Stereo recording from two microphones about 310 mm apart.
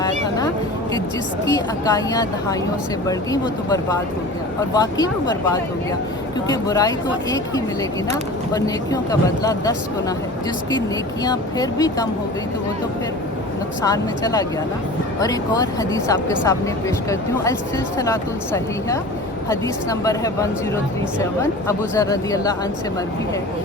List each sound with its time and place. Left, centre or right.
0.0 s speech: centre
10.8 s speech: centre
13.8 s speech: centre
17.9 s speech: centre